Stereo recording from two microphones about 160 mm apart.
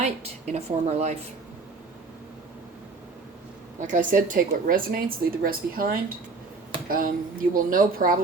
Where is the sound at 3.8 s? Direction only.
50° right (ahead or behind).